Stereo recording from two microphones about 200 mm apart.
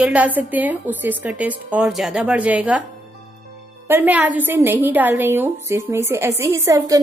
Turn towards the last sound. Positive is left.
turn(degrees=-15)  # may be behind; listen again after turning